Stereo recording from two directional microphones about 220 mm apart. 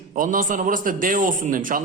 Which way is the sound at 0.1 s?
35° right (ahead or behind).